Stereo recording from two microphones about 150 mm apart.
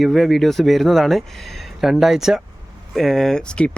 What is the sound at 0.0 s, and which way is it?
Speech, centre (ahead or behind).